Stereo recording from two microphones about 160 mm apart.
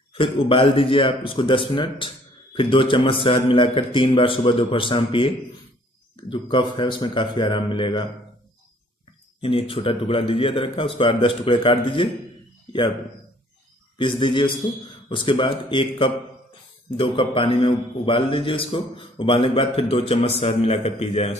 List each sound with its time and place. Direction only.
0.1 s a man's voice: 35° left (ahead or behind)
9.4 s a man's voice: 35° left (ahead or behind)
13.9 s a man's voice: 30° left (ahead or behind)